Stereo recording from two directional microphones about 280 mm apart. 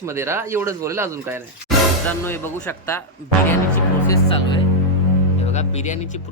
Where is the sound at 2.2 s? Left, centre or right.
Centre.